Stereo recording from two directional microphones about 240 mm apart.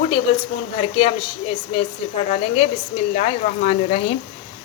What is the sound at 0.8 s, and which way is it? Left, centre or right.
A woman's voice, left.